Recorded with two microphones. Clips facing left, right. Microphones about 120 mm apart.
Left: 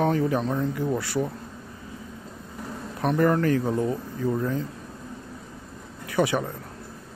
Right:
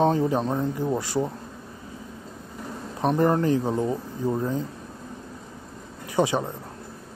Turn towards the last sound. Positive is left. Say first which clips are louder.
# right 1 dB
turn(degrees=-25)  # may be behind; listen again after turning